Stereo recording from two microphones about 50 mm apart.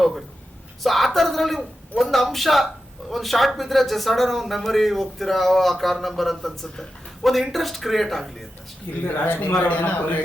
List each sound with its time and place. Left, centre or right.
0.8 s speech: centre
9.0 s a man's voice: left